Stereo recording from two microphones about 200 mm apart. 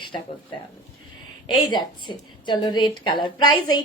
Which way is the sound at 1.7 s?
25° left (ahead or behind).